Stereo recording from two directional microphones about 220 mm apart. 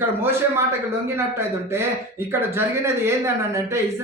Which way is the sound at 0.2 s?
10° right (ahead or behind).